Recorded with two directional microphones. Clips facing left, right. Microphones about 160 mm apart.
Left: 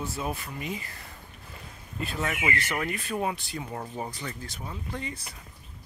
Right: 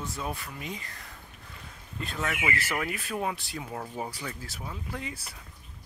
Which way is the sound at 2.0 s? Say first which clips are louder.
Left 2 dB; 5° left (ahead or behind).